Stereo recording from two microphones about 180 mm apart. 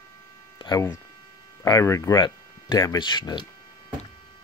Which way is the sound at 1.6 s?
20° left (ahead or behind).